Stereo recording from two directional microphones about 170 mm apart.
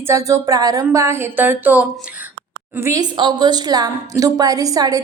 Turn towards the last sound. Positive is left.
turn(degrees=-20)  # may be behind; listen again after turning